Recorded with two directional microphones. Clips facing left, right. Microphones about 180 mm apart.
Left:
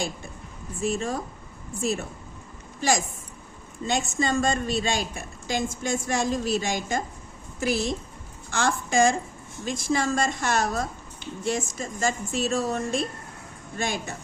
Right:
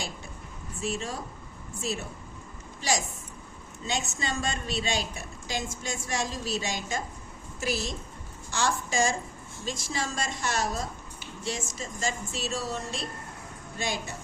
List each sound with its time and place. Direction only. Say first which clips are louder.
0.8 s a woman's voice: left 6 dB; 50° left (ahead or behind)
3.8 s a woman's voice: left 6 dB; 50° left (ahead or behind)